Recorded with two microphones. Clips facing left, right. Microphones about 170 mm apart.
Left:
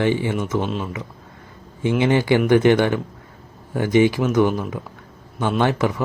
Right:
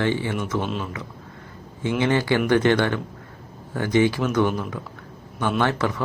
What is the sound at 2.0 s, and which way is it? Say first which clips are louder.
Speech: left 3 dB; 15° left (ahead or behind).